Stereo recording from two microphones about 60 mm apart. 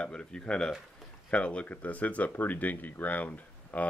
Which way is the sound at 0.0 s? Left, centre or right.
Centre.